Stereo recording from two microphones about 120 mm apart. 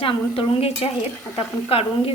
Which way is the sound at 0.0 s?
50° left (ahead or behind).